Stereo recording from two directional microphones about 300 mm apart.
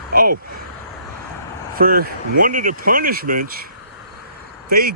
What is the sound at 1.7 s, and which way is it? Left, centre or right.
Speech, right.